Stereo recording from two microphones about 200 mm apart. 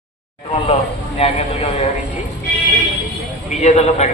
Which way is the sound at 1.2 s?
30° left (ahead or behind).